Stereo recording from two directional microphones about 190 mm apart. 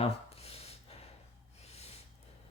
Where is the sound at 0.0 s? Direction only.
30° left (ahead or behind).